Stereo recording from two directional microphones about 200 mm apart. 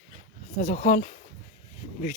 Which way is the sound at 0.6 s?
40° left (ahead or behind).